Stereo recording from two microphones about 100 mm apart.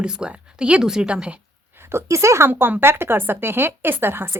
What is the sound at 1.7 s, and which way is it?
Speech, 25° right (ahead or behind).